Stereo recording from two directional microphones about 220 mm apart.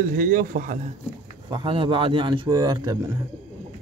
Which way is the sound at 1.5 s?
25° right (ahead or behind).